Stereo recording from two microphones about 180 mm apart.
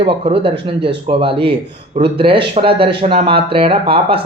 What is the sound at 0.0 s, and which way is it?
Speech, 30° right (ahead or behind).